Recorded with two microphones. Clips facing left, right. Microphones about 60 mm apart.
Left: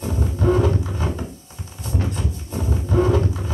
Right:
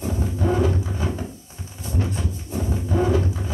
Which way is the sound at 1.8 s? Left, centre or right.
Left.